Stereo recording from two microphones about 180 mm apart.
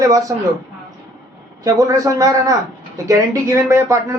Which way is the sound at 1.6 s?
20° right (ahead or behind).